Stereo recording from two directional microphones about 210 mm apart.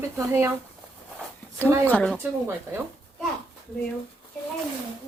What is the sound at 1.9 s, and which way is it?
Speech, 5° left (ahead or behind).